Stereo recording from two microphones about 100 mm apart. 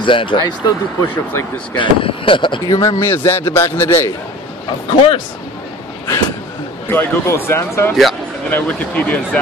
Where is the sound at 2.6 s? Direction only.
30° left (ahead or behind).